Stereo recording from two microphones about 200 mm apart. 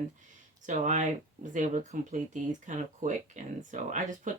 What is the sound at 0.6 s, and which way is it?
Speech, 35° right (ahead or behind).